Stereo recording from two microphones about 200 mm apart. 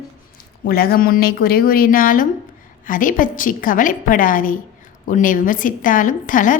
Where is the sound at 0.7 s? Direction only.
50° left (ahead or behind).